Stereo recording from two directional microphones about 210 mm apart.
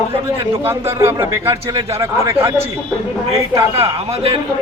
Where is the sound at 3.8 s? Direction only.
25° right (ahead or behind).